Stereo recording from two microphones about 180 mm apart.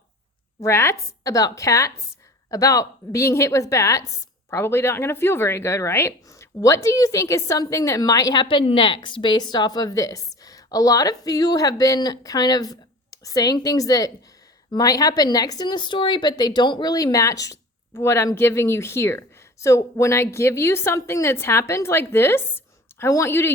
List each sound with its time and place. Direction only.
0.6 s a woman's voice: 15° left (ahead or behind)